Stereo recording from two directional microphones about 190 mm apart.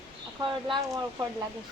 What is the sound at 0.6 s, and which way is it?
Speech, 20° right (ahead or behind).